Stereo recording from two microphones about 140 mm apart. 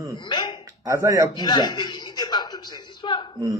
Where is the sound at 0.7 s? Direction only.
25° right (ahead or behind).